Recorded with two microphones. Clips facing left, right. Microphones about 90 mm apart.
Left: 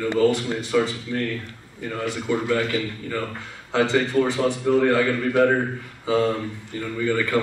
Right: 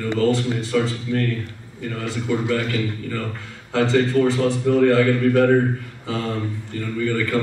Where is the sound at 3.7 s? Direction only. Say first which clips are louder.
Right 2 dB; 15° left (ahead or behind).